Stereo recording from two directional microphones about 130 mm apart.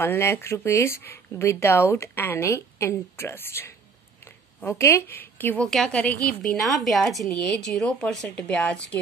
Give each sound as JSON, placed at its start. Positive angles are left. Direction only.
{"t": 0.0, "sound": "a woman's voice", "side_deg": 20}